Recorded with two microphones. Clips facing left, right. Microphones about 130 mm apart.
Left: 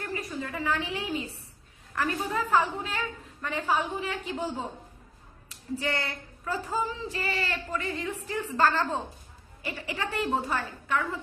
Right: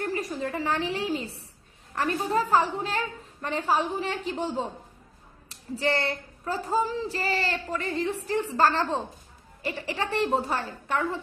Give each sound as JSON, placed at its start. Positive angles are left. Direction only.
{"t": 0.0, "sound": "a woman's voice", "side_deg": -35}
{"t": 5.7, "sound": "speech", "side_deg": -30}